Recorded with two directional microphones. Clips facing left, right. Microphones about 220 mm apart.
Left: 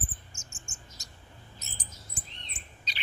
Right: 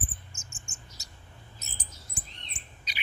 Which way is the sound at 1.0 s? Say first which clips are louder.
Left 1 dB; 5° right (ahead or behind).